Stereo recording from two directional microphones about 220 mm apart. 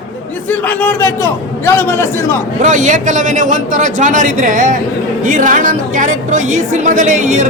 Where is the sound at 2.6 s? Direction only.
35° right (ahead or behind).